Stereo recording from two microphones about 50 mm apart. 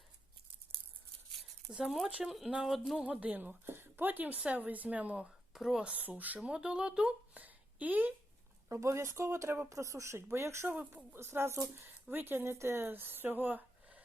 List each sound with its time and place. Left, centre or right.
1.8 s speech: centre
3.0 s speech: right
3.7 s a sound: right
4.0 s speech: right
5.5 s speech: centre
5.9 s speech: right
6.5 s speech: centre
7.3 s a sound: right
8.7 s speech: right
9.6 s speech: right
10.3 s speech: right
10.7 s speech: right
11.2 s speech: right